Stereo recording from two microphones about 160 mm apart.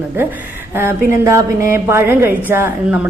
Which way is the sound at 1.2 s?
15° right (ahead or behind).